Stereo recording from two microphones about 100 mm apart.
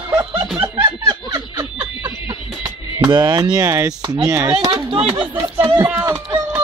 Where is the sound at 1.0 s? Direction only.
30° right (ahead or behind).